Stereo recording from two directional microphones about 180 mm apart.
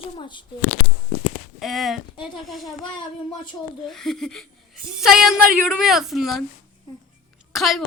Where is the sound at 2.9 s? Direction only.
25° left (ahead or behind).